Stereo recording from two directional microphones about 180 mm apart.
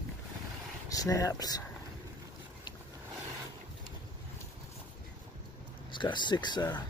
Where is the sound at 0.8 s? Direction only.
20° left (ahead or behind).